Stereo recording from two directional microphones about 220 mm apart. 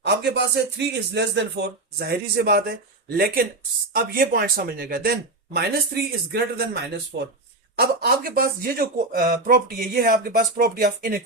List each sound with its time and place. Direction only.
0.0 s speech: 50° right (ahead or behind)